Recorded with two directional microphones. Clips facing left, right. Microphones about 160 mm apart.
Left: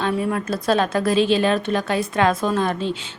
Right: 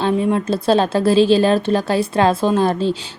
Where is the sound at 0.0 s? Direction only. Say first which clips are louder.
Right 5 dB; 25° right (ahead or behind).